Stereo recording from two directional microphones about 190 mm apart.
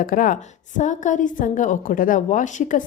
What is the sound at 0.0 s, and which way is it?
A woman's voice, 45° left (ahead or behind).